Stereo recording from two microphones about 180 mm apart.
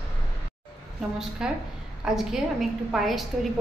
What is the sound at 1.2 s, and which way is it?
A woman's voice, 5° right (ahead or behind).